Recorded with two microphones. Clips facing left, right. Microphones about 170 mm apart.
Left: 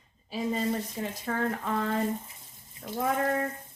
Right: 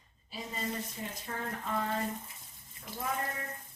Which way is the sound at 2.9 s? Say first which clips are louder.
Left 9 dB; 85° left.